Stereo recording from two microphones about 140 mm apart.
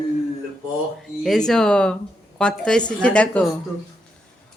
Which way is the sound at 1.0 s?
Centre (ahead or behind).